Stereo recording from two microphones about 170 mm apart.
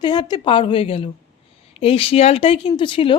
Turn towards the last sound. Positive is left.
turn(degrees=30)  # may be behind; listen again after turning